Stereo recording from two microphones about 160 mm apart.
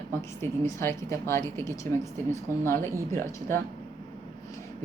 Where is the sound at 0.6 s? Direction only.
15° left (ahead or behind).